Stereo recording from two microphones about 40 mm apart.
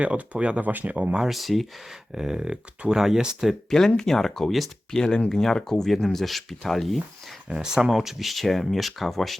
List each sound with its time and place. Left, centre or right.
0.0 s speech: right
0.6 s speech: right
1.3 s speech: centre
2.1 s speech: centre
3.7 s speech: centre
4.9 s speech: centre
7.5 s speech: centre